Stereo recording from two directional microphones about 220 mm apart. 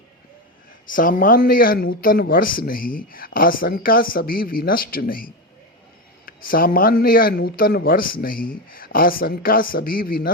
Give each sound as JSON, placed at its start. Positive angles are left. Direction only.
{"t": 0.9, "sound": "speech", "side_deg": 40}